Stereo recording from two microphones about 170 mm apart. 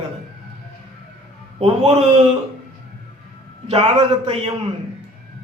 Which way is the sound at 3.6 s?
35° right (ahead or behind).